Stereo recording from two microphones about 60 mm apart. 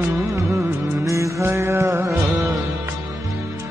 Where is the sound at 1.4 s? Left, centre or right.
Right.